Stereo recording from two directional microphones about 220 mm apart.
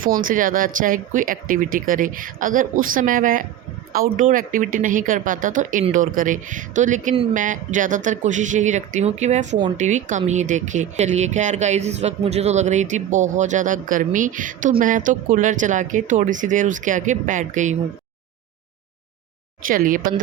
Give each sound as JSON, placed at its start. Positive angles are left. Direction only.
{"t": 0.3, "sound": "speech", "side_deg": -40}
{"t": 19.6, "sound": "speech", "side_deg": -40}